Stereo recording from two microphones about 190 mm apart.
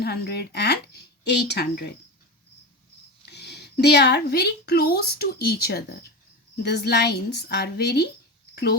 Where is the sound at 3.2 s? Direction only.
60° left (ahead or behind).